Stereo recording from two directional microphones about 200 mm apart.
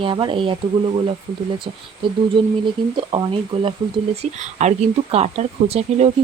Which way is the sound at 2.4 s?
25° right (ahead or behind).